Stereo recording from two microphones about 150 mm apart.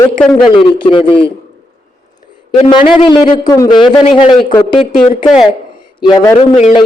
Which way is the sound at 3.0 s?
30° left (ahead or behind).